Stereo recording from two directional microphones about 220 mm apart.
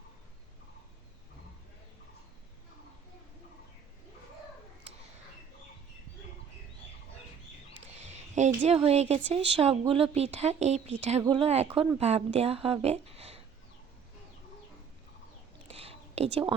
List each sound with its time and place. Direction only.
7.9 s speech: 30° right (ahead or behind)
15.6 s whispering: 25° right (ahead or behind)